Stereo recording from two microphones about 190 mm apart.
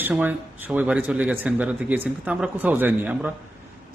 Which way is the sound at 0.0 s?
10° right (ahead or behind).